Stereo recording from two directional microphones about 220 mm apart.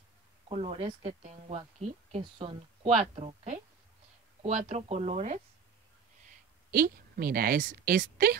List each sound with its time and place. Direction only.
0.5 s speech: 25° right (ahead or behind)
6.2 s a woman's voice: 40° right (ahead or behind)